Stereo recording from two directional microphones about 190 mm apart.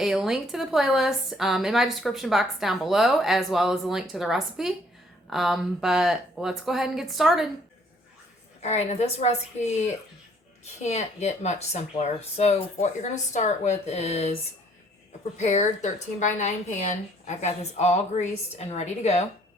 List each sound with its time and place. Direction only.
0.0 s a woman's voice: centre (ahead or behind)
8.6 s a woman's voice: 35° left (ahead or behind)
15.4 s a woman's voice: 35° left (ahead or behind)